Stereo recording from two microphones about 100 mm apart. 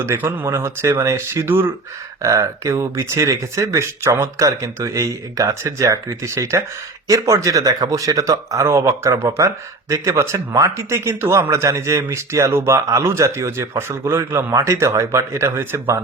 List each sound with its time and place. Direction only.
0.0 s speech: 25° right (ahead or behind)
2.2 s speech: 35° right (ahead or behind)